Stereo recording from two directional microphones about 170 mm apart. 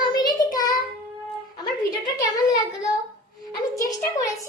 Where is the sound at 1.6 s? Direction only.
25° left (ahead or behind).